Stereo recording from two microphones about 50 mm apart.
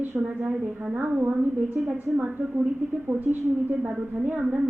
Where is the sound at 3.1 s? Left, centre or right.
Right.